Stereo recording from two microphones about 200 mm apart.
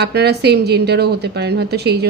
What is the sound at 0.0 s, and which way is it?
A woman's voice, 55° right (ahead or behind).